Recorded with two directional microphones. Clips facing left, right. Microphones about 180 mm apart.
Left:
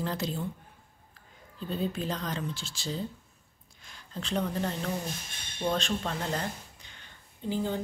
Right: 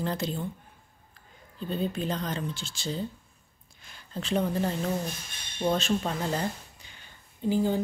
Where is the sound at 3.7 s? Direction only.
5° right (ahead or behind).